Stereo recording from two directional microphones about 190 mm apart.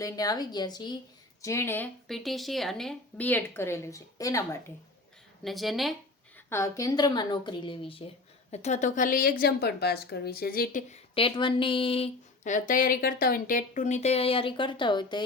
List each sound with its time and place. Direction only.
0.0 s speech: 20° left (ahead or behind)
5.4 s speech: centre (ahead or behind)
6.5 s a woman's voice: 15° left (ahead or behind); by 11.0 s 45° left (ahead or behind)
11.1 s a woman's voice: 30° left (ahead or behind)